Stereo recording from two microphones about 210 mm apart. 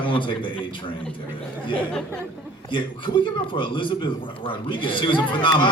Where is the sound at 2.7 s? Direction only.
25° left (ahead or behind).